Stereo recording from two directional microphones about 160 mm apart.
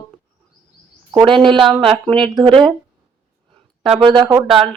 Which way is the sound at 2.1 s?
30° right (ahead or behind).